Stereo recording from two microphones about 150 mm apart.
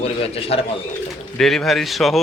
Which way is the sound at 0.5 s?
40° left (ahead or behind).